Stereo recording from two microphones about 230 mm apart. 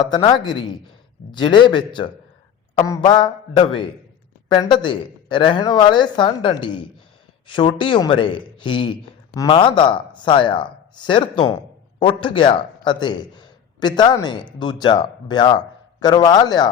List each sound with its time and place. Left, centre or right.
0.0 s a man's voice: centre